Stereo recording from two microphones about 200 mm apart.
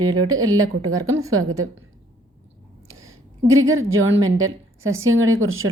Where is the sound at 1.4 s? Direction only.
90° right.